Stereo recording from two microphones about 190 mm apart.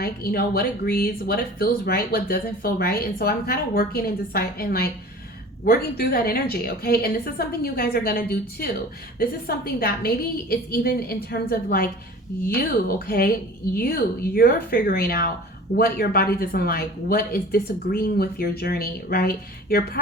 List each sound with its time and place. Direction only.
0.0 s speech: 55° left (ahead or behind)